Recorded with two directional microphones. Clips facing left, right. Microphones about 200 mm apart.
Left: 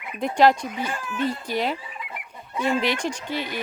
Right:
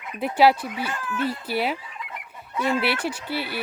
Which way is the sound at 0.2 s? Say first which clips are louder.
Even; 5° right (ahead or behind).